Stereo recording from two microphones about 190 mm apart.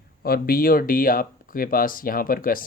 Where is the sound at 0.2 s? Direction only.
50° left (ahead or behind).